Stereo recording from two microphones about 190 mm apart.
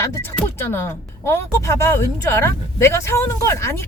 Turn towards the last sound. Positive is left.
turn(degrees=15)  # may be behind; listen again after turning